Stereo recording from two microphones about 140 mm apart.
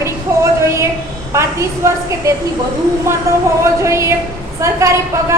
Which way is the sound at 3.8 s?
20° right (ahead or behind).